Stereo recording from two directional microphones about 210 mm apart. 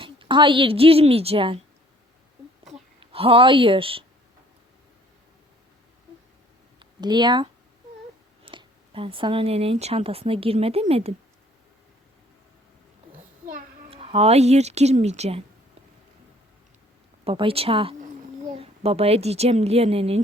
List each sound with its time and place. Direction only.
0.0 s speech: 25° right (ahead or behind)
3.0 s speech: 25° right (ahead or behind)
6.7 s speech: 20° right (ahead or behind)
13.9 s speech: 25° right (ahead or behind)
17.2 s speech: 25° right (ahead or behind)